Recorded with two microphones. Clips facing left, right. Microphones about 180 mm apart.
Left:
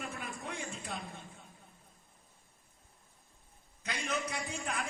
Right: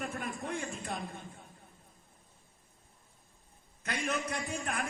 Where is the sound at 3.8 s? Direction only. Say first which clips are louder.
Right 2 dB; 55° right (ahead or behind).